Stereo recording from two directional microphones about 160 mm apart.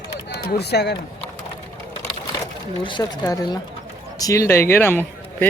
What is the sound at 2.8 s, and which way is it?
Speech, 30° left (ahead or behind).